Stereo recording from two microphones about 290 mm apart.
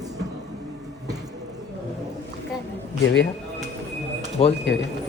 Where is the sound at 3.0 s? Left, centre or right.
Left.